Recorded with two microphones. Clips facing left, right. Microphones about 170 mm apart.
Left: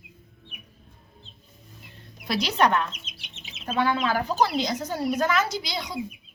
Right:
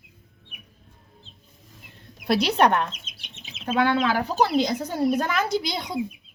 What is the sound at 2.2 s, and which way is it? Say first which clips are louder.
Speech: right 3 dB; 60° right (ahead or behind).